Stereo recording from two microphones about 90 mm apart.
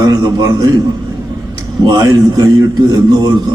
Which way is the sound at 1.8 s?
50° right (ahead or behind).